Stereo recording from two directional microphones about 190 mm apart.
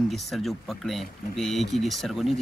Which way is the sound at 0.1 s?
Centre (ahead or behind).